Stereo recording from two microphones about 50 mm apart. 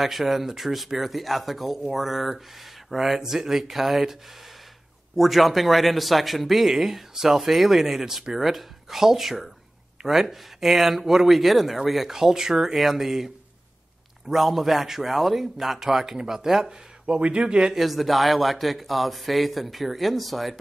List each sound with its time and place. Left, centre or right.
0.0 s a man's voice: centre
14.3 s a man's voice: centre
17.7 s a man's voice: centre